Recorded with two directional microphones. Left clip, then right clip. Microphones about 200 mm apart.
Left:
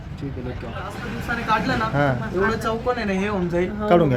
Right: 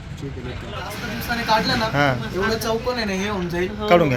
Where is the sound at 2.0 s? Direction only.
5° left (ahead or behind).